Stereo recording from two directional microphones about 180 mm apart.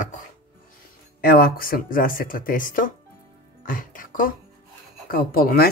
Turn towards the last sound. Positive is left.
turn(degrees=55)  # may be behind; listen again after turning